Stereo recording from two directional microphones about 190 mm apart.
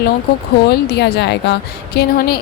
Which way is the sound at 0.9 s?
60° left (ahead or behind).